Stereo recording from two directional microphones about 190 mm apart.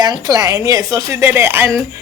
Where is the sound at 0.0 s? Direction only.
20° right (ahead or behind).